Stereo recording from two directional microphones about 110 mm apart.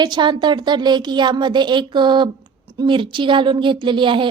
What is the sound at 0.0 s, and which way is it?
A woman's voice, 40° right (ahead or behind).